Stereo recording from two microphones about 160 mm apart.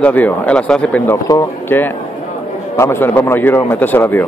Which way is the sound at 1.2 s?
20° left (ahead or behind).